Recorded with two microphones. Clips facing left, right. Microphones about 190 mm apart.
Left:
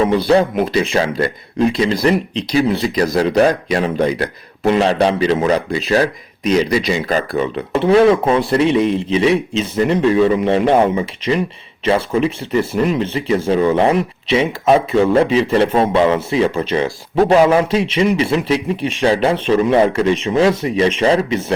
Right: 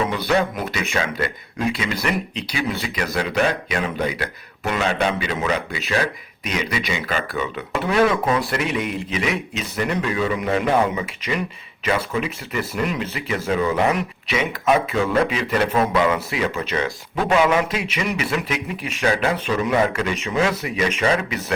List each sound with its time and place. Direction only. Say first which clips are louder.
0.3 s speech: left 7 dB; 30° left (ahead or behind)